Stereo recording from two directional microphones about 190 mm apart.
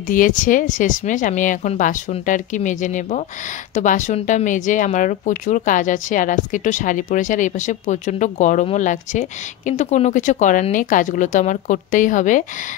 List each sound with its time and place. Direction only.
0.1 s speech: 45° left (ahead or behind)